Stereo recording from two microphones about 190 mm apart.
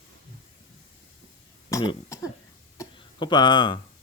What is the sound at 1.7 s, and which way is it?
Cough, 20° left (ahead or behind).